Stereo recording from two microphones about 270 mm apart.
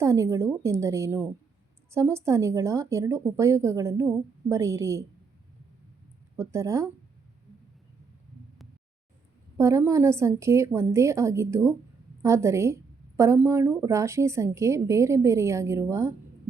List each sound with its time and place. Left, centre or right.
0.0 s a woman's voice: centre
6.3 s a woman's voice: centre
9.6 s a woman's voice: centre